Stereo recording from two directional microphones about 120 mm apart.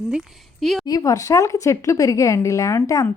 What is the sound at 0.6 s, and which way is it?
Speech, centre (ahead or behind).